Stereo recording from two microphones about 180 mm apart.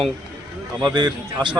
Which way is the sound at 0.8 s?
25° right (ahead or behind).